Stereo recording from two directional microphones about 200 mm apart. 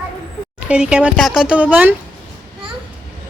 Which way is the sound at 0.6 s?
5° right (ahead or behind).